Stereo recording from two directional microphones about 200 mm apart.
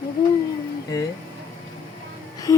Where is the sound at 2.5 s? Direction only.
15° left (ahead or behind).